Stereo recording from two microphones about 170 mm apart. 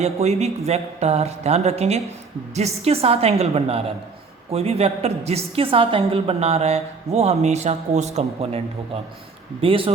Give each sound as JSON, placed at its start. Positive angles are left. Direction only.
{"t": 0.0, "sound": "a woman's voice", "side_deg": -40}